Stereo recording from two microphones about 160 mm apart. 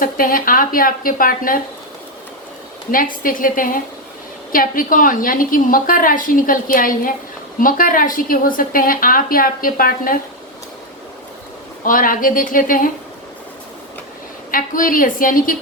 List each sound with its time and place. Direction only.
0.0 s a woman's voice: 60° left (ahead or behind)
2.9 s a woman's voice: 60° left (ahead or behind)
11.9 s a woman's voice: 60° left (ahead or behind)
14.5 s a woman's voice: 55° left (ahead or behind)